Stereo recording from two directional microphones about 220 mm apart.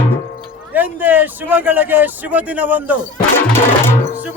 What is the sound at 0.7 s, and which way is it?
Speech, 10° right (ahead or behind).